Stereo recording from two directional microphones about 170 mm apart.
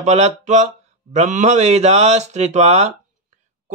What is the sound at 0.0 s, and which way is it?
Speech, 40° right (ahead or behind).